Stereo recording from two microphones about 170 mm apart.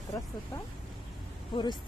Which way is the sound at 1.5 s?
25° left (ahead or behind).